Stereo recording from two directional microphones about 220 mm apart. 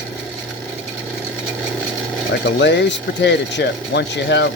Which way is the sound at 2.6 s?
50° left (ahead or behind).